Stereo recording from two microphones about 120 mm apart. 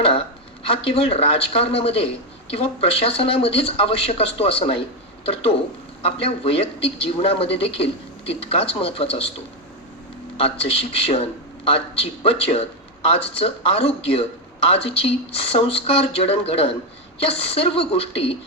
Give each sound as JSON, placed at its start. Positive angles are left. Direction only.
{"t": 0.0, "sound": "speech", "side_deg": 50}
{"t": 10.3, "sound": "speech", "side_deg": 50}